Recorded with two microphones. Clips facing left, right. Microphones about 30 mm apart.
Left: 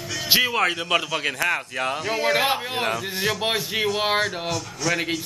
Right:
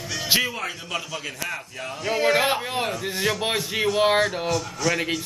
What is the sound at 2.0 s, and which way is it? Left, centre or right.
Speech, centre.